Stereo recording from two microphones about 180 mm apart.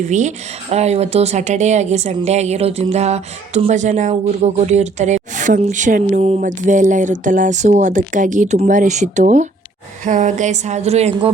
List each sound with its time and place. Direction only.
0.0 s speech: 40° right (ahead or behind)